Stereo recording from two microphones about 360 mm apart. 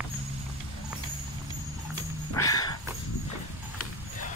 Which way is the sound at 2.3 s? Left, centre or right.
Centre.